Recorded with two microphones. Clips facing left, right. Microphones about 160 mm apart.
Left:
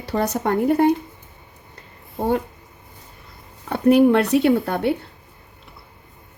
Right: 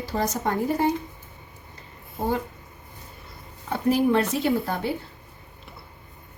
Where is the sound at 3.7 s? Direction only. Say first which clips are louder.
Left 7 dB; 65° left (ahead or behind).